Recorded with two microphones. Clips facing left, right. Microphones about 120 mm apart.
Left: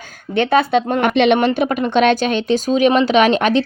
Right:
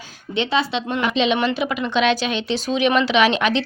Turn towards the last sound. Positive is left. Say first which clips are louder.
# left 4 dB
turn(degrees=45)  # may be behind; listen again after turning